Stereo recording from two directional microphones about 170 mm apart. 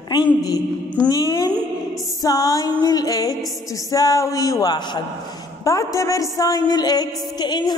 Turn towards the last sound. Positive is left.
turn(degrees=25)  # may be behind; listen again after turning